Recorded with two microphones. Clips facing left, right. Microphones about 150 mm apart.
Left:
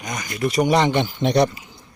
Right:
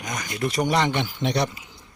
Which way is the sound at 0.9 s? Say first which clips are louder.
Left 6 dB; 40° left (ahead or behind).